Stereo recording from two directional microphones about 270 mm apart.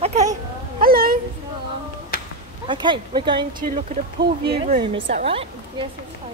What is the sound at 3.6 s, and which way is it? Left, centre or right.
A woman's voice, right.